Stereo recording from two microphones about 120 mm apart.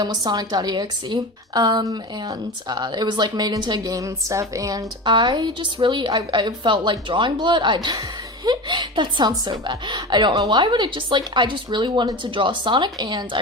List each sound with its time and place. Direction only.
0.0 s a woman's voice: 35° right (ahead or behind)
5.0 s a woman's voice: 40° right (ahead or behind)